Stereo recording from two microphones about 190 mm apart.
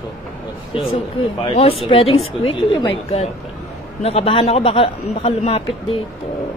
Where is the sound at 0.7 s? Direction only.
25° left (ahead or behind).